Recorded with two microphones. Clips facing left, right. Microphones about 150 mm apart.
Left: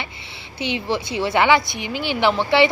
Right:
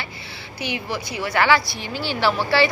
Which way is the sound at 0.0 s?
20° left (ahead or behind).